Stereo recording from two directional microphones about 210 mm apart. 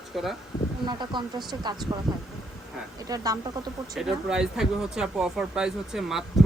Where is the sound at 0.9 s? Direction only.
20° right (ahead or behind).